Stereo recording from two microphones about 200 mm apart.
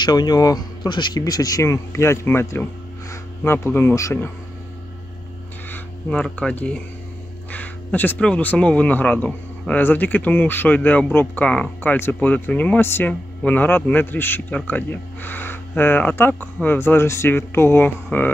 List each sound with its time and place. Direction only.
0.0 s speech: 20° left (ahead or behind)
5.7 s a man's voice: 5° left (ahead or behind)